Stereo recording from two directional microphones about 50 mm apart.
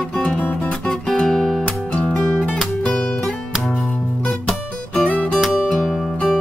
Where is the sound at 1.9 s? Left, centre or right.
Left.